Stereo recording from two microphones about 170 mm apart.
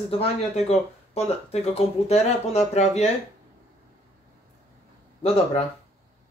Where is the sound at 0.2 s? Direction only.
40° left (ahead or behind).